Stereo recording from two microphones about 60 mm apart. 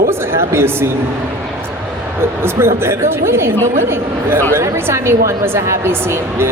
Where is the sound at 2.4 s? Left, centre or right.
Right.